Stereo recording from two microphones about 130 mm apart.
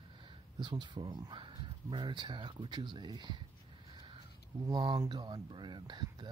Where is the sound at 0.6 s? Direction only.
35° right (ahead or behind).